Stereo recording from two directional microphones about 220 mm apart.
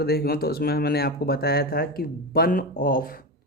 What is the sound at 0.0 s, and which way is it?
Speech, 45° left (ahead or behind).